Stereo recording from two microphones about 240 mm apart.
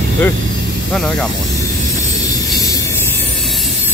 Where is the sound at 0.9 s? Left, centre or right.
Centre.